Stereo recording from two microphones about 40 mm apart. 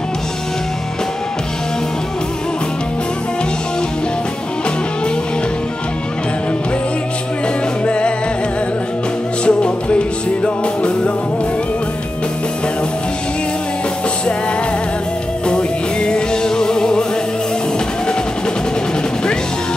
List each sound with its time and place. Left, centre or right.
7.8 s music: left
9.4 s music: left
15.4 s music: left